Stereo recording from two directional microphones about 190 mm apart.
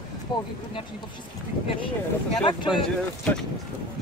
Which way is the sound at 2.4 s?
25° left (ahead or behind).